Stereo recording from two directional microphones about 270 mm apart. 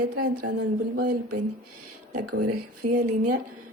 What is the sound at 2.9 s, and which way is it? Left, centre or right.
Speech, right.